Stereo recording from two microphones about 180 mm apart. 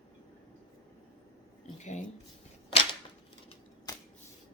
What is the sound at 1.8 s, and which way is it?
Speech, 40° left (ahead or behind).